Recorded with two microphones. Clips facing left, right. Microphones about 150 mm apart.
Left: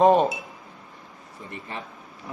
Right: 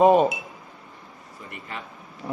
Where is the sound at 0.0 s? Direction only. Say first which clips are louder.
Right 1 dB; 10° right (ahead or behind).